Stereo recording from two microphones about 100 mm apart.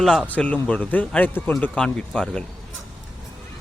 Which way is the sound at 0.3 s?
15° left (ahead or behind).